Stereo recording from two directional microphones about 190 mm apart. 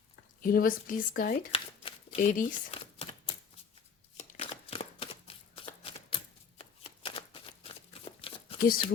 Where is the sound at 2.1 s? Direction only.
45° left (ahead or behind).